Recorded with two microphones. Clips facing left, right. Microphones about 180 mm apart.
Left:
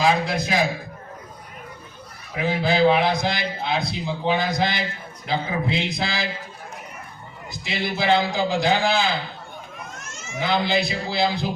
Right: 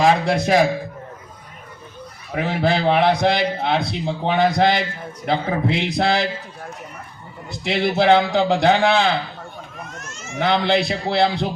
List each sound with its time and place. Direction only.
0.0 s a man's voice: 70° right (ahead or behind)
2.3 s a man's voice: 65° right (ahead or behind)
5.2 s a man's voice: 65° right (ahead or behind)
7.5 s a man's voice: 65° right (ahead or behind)
10.3 s a man's voice: 70° right (ahead or behind)